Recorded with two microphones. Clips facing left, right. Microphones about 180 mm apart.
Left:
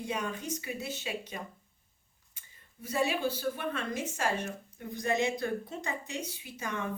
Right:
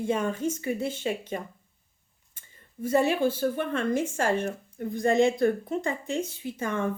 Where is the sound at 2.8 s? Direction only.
50° right (ahead or behind).